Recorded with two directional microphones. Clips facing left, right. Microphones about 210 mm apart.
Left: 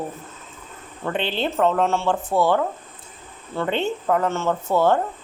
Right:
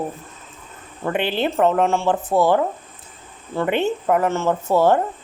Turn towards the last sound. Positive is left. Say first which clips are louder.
# right 2 dB
turn(degrees=-40)  # may be behind; listen again after turning